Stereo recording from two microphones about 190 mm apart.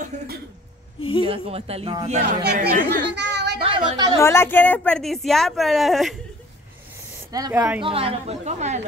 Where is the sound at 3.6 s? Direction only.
30° right (ahead or behind).